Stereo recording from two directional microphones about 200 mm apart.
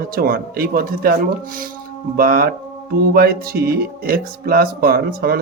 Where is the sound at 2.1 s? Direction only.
45° right (ahead or behind).